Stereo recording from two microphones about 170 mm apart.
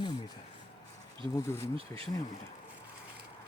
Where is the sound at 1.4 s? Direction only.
15° left (ahead or behind).